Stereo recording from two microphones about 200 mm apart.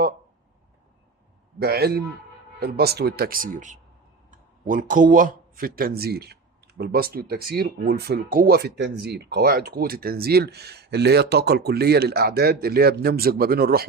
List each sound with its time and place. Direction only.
1.5 s speech: 55° right (ahead or behind)